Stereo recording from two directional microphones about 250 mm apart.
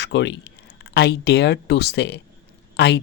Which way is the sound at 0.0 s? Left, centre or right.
Left.